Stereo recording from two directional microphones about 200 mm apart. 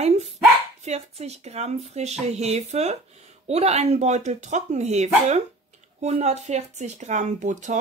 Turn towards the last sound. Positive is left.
turn(degrees=-40)  # may be behind; listen again after turning